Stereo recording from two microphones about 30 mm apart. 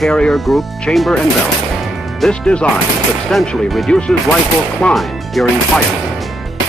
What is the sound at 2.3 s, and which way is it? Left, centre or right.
Speech, left.